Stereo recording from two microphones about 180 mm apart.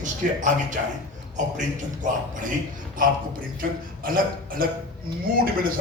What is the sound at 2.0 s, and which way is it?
Speech, 45° right (ahead or behind).